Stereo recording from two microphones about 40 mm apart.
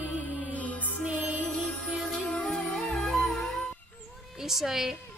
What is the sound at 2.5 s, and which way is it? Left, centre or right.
Music, centre.